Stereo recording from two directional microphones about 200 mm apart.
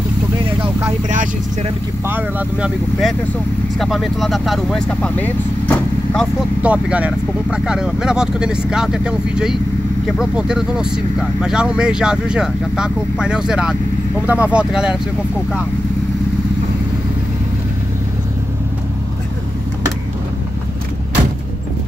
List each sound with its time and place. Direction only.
0.6 s vehicle: 25° right (ahead or behind)
2.0 s speech: 10° right (ahead or behind); by 6.2 s 10° left (ahead or behind)
6.6 s speech: 5° right (ahead or behind)